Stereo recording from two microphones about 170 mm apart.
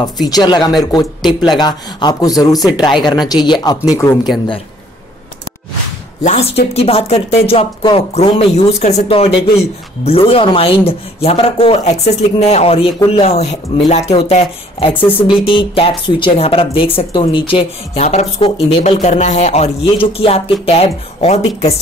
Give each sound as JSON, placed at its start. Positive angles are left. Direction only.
{"t": 0.3, "sound": "speech", "side_deg": 25}
{"t": 6.2, "sound": "a woman's voice", "side_deg": 40}